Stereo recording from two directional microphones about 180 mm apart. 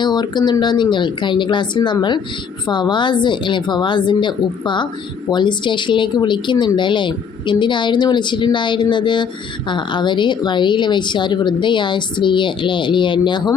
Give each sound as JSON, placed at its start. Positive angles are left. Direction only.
{"t": 0.0, "sound": "speech", "side_deg": 25}